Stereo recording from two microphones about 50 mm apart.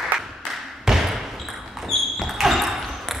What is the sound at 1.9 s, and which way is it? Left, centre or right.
Basketball bounce, centre.